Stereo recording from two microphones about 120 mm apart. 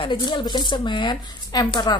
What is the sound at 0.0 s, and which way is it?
Speech, 40° left (ahead or behind).